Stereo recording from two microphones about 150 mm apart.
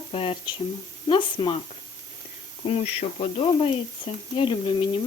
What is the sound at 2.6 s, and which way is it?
Speech, 40° left (ahead or behind).